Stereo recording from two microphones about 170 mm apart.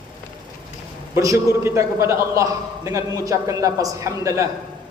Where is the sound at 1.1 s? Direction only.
15° right (ahead or behind).